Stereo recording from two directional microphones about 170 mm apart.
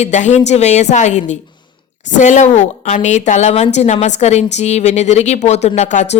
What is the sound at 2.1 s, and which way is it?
A woman's voice, 45° left (ahead or behind).